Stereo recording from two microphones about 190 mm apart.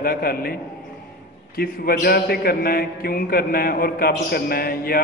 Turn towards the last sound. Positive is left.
turn(degrees=50)  # may be behind; listen again after turning